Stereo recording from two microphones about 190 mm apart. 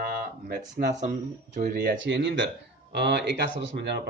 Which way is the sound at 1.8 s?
65° right (ahead or behind).